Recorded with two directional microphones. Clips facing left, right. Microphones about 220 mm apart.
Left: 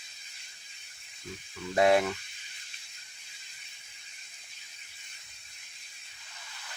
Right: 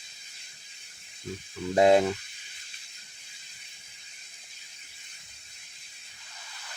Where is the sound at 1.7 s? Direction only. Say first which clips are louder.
Right 4 dB; 25° right (ahead or behind).